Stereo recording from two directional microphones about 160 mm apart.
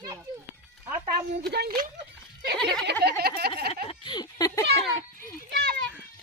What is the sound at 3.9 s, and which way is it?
Speech, 30° left (ahead or behind).